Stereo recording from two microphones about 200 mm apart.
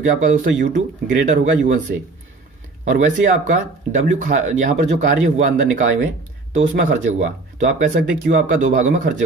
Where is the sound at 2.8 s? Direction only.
40° right (ahead or behind).